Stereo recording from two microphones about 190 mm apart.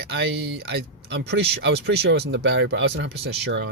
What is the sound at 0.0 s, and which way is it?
Speech, 60° right (ahead or behind).